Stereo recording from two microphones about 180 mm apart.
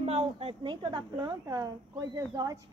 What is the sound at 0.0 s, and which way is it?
A woman's voice, 35° right (ahead or behind).